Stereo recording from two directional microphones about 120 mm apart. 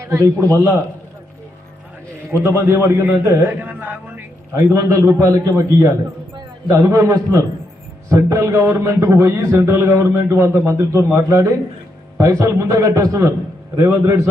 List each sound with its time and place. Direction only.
0.0 s a man's voice: 25° right (ahead or behind)
2.3 s a man's voice: 20° right (ahead or behind)